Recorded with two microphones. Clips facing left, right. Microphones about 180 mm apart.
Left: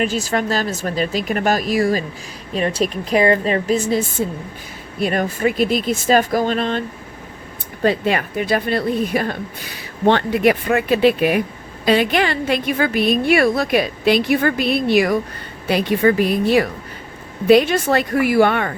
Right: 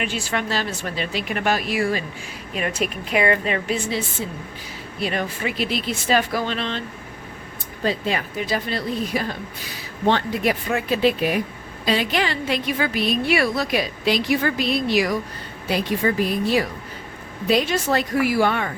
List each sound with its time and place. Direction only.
0.0 s speech: 40° left (ahead or behind)
7.9 s speech: 60° left (ahead or behind)